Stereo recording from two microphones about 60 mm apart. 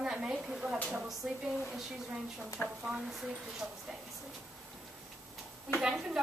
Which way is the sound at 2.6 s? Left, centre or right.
Centre.